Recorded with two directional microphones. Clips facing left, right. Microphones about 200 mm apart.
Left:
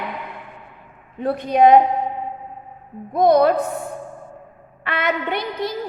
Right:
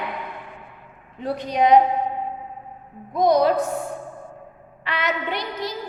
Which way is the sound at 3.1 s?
55° left (ahead or behind).